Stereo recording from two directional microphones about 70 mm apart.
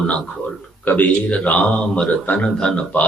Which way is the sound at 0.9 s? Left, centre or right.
Left.